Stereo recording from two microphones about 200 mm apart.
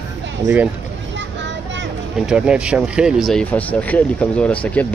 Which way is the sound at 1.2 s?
60° right (ahead or behind).